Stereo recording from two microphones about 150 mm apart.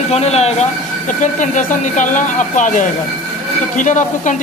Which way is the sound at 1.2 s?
55° left (ahead or behind).